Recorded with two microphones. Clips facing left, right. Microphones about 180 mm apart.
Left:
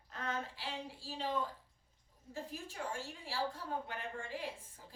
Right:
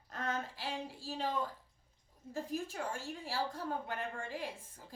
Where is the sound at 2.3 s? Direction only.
45° right (ahead or behind).